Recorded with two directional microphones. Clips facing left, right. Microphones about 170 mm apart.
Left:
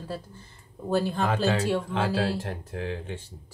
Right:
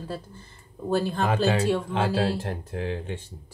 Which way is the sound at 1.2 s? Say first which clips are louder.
Right 2 dB; 15° right (ahead or behind).